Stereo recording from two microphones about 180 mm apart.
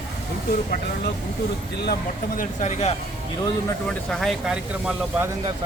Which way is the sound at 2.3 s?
40° left (ahead or behind).